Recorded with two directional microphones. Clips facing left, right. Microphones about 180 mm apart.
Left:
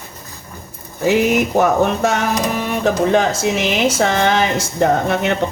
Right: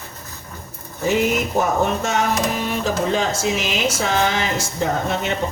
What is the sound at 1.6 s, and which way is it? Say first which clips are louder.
Speech: left 5 dB; 65° left (ahead or behind).